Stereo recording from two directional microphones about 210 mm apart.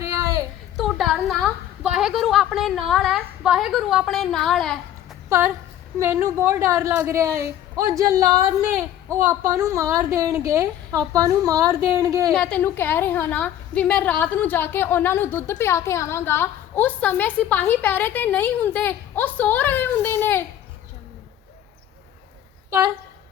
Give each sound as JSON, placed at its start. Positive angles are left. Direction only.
{"t": 0.0, "sound": "a sound", "side_deg": -15}
{"t": 0.8, "sound": "a woman's voice", "side_deg": 0}
{"t": 6.0, "sound": "a woman's voice", "side_deg": -15}
{"t": 12.3, "sound": "a woman's voice", "side_deg": 5}